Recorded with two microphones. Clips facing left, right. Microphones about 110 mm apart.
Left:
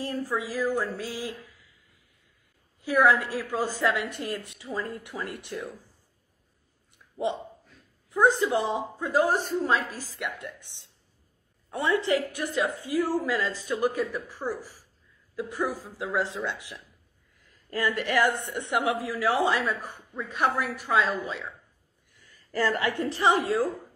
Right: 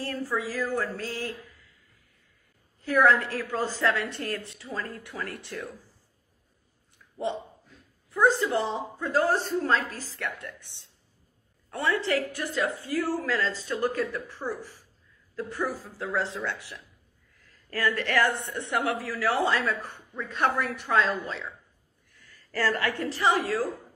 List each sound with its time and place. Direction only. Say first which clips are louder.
0.0 s a woman's voice: even; 15° left (ahead or behind)
2.8 s a woman's voice: even; 10° left (ahead or behind)
8.1 s a woman's voice: left 1 dB; 15° left (ahead or behind)
22.1 s a woman's voice: left 2 dB; 15° left (ahead or behind)